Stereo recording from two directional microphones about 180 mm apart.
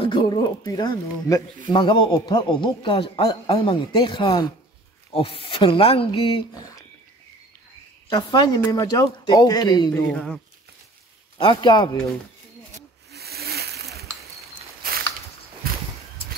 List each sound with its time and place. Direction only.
0.0 s speech: 25° left (ahead or behind)
6.5 s speech: 20° left (ahead or behind)
8.1 s speech: 25° left (ahead or behind)
10.1 s speech: 5° left (ahead or behind)
11.3 s speech: 25° left (ahead or behind)
13.1 s splash: 60° right (ahead or behind)
14.8 s a sound: 55° right (ahead or behind)
15.6 s walk: 55° right (ahead or behind)